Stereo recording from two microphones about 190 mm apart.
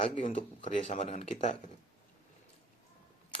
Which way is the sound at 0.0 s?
35° left (ahead or behind).